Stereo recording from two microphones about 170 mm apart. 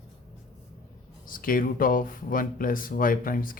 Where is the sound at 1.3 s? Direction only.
55° left (ahead or behind).